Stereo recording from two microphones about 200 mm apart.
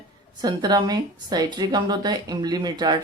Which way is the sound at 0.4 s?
20° right (ahead or behind).